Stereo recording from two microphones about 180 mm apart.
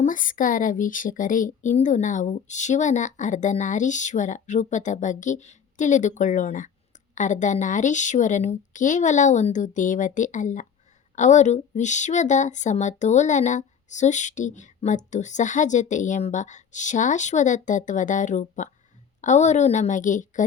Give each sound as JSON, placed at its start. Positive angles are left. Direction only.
{"t": 0.0, "sound": "speech", "side_deg": 50}